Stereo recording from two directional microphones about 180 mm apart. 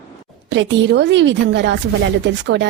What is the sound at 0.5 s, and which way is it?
A woman's voice, 85° right.